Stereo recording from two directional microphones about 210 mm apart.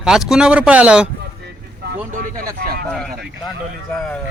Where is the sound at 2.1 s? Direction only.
40° right (ahead or behind).